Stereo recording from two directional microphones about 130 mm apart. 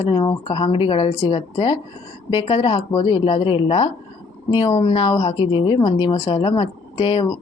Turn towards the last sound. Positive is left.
turn(degrees=45)  # may be behind; listen again after turning